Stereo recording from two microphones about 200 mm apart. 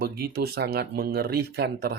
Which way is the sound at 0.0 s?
50° right (ahead or behind).